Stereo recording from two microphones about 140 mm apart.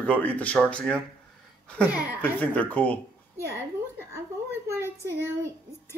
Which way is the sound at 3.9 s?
20° right (ahead or behind).